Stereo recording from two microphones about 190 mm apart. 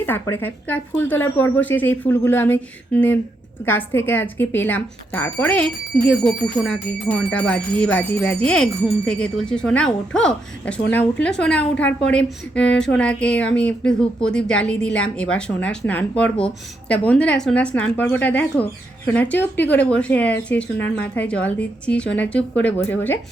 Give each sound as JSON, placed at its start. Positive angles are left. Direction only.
{"t": 0.0, "sound": "speech", "side_deg": 10}